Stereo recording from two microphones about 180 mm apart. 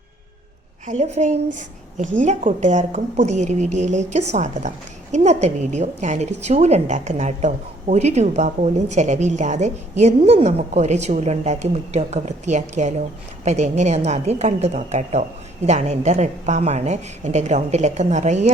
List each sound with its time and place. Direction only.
0.9 s a woman's voice: 40° right (ahead or behind)